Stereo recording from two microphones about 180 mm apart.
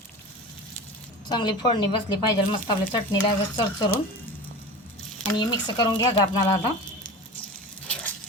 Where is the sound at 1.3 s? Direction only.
25° left (ahead or behind).